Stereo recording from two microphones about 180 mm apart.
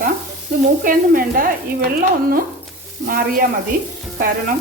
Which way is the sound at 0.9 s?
55° right (ahead or behind).